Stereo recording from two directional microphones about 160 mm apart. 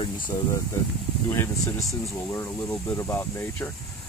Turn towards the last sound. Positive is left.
turn(degrees=15)  # may be behind; listen again after turning